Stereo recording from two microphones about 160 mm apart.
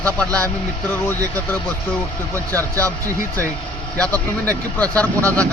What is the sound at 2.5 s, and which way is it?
Speech, 20° right (ahead or behind).